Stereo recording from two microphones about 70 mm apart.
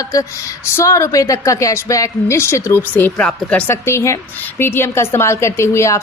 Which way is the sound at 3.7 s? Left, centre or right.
Left.